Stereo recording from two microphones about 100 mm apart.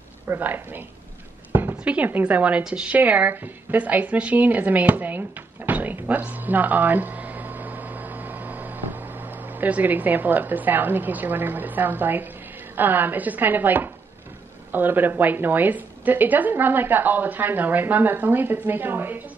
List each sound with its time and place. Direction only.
0.3 s a woman's voice: 20° right (ahead or behind)
5.7 s a sound: 15° right (ahead or behind)
9.6 s a woman's voice: 15° right (ahead or behind)